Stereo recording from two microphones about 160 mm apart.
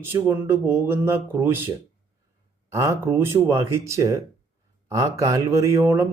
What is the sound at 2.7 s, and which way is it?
Speech, 20° right (ahead or behind).